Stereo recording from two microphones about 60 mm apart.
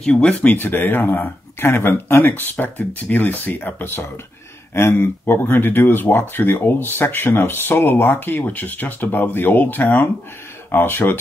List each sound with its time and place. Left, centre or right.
0.0 s speech: centre; by 11.1 s left